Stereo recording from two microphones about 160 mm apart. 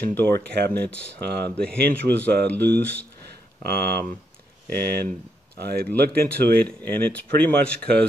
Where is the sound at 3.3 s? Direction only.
75° right (ahead or behind).